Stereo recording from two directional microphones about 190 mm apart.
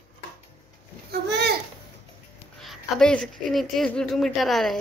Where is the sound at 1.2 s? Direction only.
60° right (ahead or behind).